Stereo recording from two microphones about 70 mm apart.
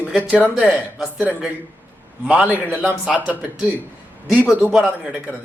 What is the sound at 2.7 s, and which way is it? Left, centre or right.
A man's voice, right.